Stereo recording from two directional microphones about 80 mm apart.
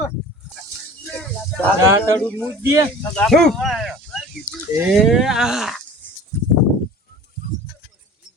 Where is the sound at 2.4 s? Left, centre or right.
Right.